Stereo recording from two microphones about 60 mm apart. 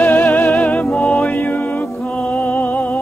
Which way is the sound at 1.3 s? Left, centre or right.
Left.